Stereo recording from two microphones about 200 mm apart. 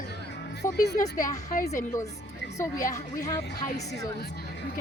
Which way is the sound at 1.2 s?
40° left (ahead or behind).